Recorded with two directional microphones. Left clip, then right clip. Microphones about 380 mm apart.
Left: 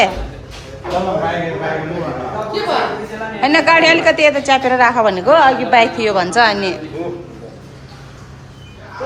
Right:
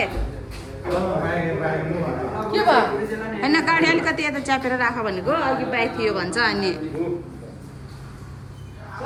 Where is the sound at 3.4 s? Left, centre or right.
Centre.